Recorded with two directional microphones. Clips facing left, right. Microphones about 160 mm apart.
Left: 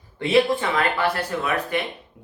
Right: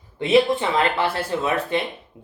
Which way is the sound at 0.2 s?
20° right (ahead or behind).